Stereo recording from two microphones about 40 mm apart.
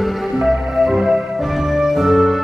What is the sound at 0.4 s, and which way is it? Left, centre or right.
Music, centre.